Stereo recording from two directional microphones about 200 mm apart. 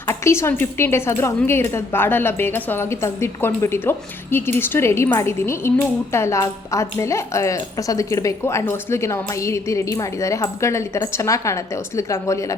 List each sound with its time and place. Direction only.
0.1 s a woman's voice: 15° left (ahead or behind)